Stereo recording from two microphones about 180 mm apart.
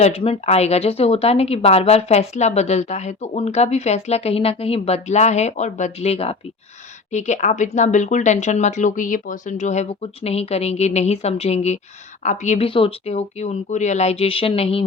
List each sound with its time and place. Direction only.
0.0 s speech: 35° left (ahead or behind)